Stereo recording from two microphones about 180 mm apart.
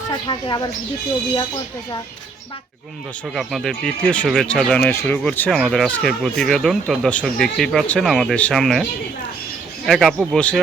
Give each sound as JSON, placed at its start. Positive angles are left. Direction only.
{"t": 0.1, "sound": "speech", "side_deg": 25}
{"t": 3.3, "sound": "speech", "side_deg": 0}